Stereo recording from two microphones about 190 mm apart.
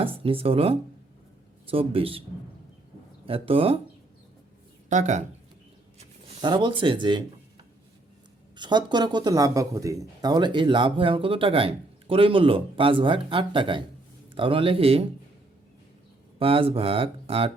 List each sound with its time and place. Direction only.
0.0 s speech: 30° right (ahead or behind)
3.2 s speech: 30° right (ahead or behind)
4.9 s speech: 40° right (ahead or behind)
6.2 s speech: 25° right (ahead or behind)
8.5 s speech: 25° right (ahead or behind)
16.4 s speech: 30° right (ahead or behind)